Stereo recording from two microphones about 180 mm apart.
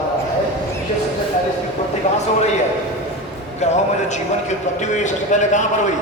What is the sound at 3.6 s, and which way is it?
A man's voice, 40° left (ahead or behind).